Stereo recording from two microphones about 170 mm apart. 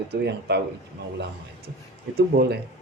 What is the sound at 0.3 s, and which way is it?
Speech, 75° right (ahead or behind).